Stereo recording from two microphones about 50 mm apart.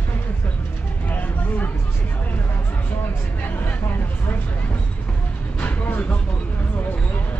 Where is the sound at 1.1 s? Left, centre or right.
Left.